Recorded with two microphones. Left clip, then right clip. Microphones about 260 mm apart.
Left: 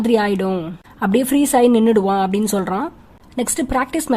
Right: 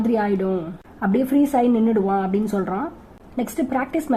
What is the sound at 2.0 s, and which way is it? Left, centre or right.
Speech, left.